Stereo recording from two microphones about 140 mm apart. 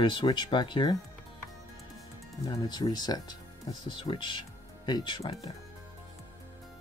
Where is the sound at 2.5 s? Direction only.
30° left (ahead or behind).